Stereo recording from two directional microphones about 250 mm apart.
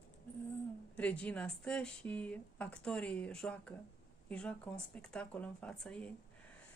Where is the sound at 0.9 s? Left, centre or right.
Centre.